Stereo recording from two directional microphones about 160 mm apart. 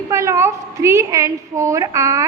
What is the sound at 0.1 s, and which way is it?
A woman's voice, 20° right (ahead or behind).